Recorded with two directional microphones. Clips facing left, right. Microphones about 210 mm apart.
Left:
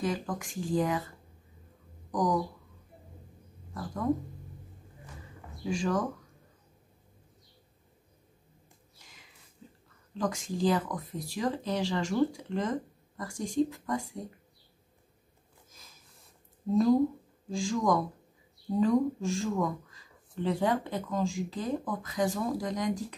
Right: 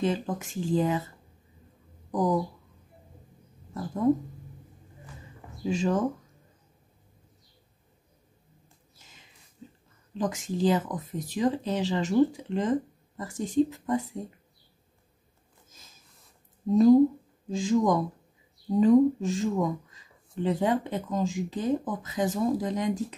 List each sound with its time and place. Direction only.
0.0 s speech: 25° right (ahead or behind)
3.7 s speech: 25° right (ahead or behind)
5.7 s speech: 20° right (ahead or behind)
10.1 s speech: 20° right (ahead or behind)
17.5 s speech: 20° right (ahead or behind)